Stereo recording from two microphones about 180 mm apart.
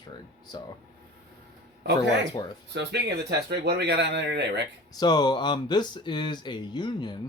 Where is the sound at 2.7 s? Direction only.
70° right (ahead or behind).